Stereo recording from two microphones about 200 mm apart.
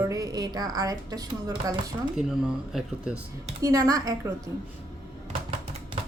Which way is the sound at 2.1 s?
5° right (ahead or behind).